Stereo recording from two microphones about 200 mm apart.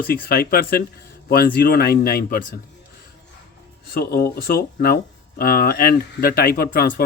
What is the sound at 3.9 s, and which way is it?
Speech, 50° left (ahead or behind).